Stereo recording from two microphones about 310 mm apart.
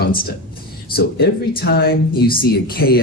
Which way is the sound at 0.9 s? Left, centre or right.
Left.